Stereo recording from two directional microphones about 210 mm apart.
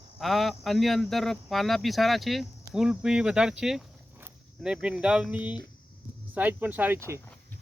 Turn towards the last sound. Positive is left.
turn(degrees=-10)  # may be behind; listen again after turning